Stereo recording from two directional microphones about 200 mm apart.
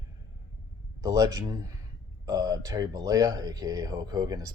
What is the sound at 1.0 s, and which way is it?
Speech, 20° right (ahead or behind).